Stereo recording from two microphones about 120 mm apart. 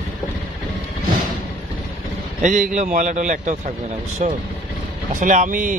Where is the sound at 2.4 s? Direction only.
90° right.